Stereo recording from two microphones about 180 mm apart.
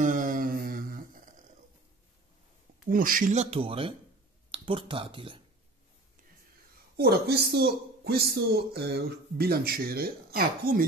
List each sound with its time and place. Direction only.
0.0 s a sound: 50° right (ahead or behind)
2.9 s speech: 50° right (ahead or behind); by 5.4 s 30° right (ahead or behind)
7.0 s speech: 60° right (ahead or behind)